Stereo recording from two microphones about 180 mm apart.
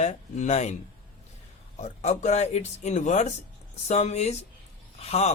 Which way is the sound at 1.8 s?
40° left (ahead or behind).